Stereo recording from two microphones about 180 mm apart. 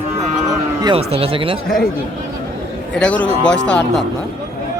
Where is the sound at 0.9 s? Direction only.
35° right (ahead or behind).